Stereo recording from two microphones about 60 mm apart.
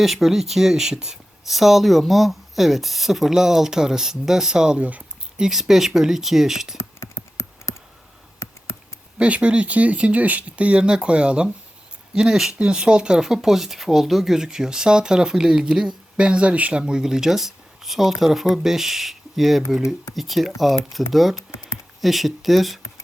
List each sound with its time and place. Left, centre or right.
0.0 s speech: centre
4.8 s speech: right
5.4 s speech: centre
6.7 s a sound: left
9.1 s speech: centre